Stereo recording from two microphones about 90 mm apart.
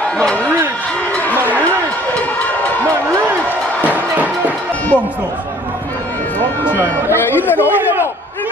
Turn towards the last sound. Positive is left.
turn(degrees=20)  # may be behind; listen again after turning